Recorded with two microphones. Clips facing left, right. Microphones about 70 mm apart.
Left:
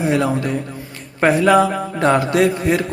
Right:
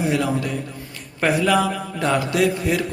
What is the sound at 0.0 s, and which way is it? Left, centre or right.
A man's voice, left.